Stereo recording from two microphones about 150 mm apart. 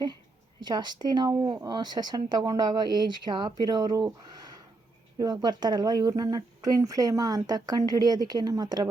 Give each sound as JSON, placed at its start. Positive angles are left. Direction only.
{"t": 0.6, "sound": "speech", "side_deg": -30}
{"t": 5.1, "sound": "speech", "side_deg": -25}